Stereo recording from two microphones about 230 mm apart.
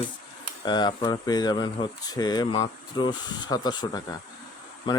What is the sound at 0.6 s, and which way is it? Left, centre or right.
Speech, centre.